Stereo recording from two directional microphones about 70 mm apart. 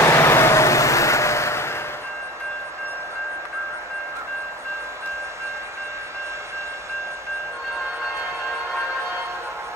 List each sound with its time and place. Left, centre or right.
0.0 s vehicle: left